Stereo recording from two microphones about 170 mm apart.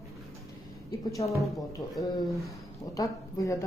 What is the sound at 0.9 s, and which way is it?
A woman's voice, 20° left (ahead or behind).